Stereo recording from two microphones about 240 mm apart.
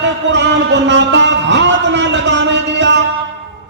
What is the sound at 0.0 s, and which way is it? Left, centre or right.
Music, right.